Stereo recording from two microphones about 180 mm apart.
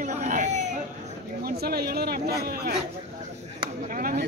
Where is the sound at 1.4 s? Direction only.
60° right (ahead or behind).